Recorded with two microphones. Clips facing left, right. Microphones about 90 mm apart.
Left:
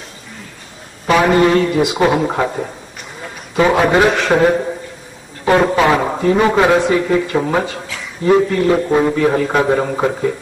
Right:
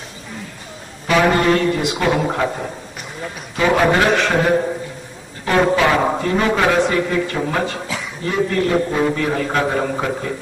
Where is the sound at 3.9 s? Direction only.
Centre (ahead or behind).